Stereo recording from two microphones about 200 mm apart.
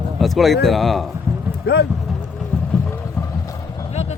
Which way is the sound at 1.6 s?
55° left (ahead or behind).